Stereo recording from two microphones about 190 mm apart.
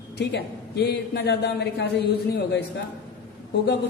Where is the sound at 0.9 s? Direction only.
60° left (ahead or behind).